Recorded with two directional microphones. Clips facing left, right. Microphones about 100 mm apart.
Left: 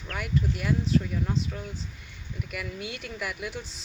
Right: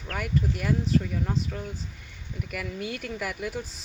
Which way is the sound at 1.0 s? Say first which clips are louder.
Even; 55° right (ahead or behind).